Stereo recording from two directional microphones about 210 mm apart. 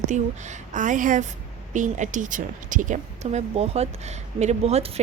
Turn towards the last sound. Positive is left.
turn(degrees=-30)  # may be behind; listen again after turning